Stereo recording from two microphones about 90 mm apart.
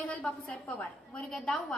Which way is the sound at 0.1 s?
15° left (ahead or behind).